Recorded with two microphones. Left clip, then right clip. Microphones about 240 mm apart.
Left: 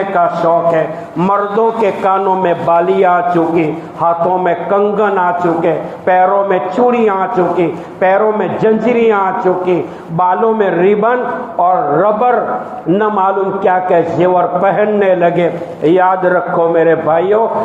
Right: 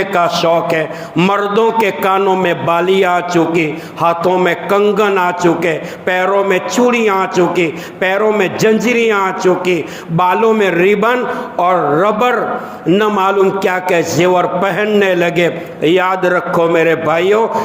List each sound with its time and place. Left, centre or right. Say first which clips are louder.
0.2 s a man's voice: left 1 dB; right
9.0 s a man's voice: left 2 dB; right